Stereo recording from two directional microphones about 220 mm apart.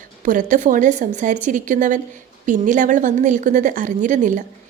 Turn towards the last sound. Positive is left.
turn(degrees=-35)  # may be behind; listen again after turning